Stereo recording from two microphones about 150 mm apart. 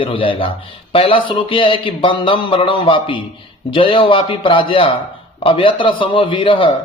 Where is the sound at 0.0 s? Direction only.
35° left (ahead or behind).